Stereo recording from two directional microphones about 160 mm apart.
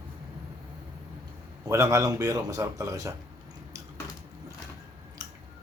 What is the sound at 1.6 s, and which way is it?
Speech, 20° right (ahead or behind).